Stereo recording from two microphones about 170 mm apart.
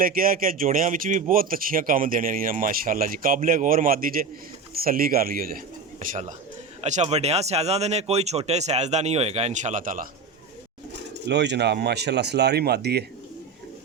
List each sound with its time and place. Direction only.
0.0 s speech: 60° right (ahead or behind)
11.3 s speech: 80° right